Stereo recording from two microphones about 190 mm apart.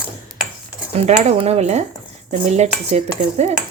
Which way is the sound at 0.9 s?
35° right (ahead or behind).